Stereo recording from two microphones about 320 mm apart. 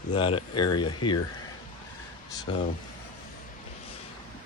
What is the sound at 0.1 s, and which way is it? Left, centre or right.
Speech, centre.